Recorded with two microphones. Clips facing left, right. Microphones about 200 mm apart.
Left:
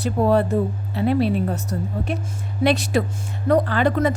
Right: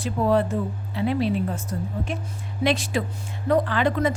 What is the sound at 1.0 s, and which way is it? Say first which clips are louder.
Speech: left 4 dB; 50° left (ahead or behind).